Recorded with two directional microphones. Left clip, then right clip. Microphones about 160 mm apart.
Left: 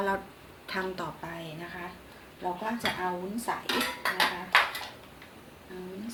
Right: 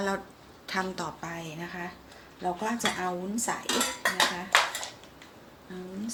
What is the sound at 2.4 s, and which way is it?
Speech, 50° right (ahead or behind).